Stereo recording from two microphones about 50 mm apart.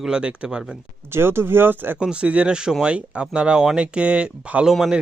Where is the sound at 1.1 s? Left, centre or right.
Right.